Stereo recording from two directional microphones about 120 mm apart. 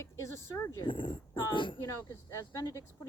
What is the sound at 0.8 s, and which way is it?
Speech, 45° left (ahead or behind).